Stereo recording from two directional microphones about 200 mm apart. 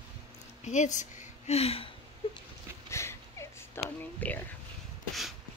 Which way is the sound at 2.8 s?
15° left (ahead or behind).